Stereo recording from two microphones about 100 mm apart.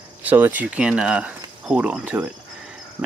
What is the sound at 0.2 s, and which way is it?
Speech, 15° right (ahead or behind).